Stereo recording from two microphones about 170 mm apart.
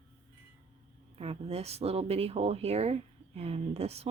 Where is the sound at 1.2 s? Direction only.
35° right (ahead or behind).